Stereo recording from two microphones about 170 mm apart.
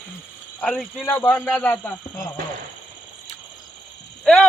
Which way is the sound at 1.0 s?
10° left (ahead or behind).